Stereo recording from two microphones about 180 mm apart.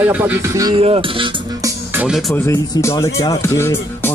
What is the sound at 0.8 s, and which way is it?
Speech, 30° right (ahead or behind).